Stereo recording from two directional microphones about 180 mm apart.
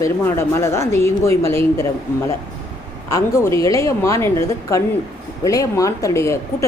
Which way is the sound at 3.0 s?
15° left (ahead or behind).